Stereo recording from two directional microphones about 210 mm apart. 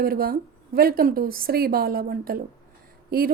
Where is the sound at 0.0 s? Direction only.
45° right (ahead or behind).